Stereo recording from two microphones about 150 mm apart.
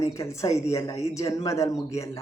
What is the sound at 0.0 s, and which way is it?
A man's voice, 20° left (ahead or behind).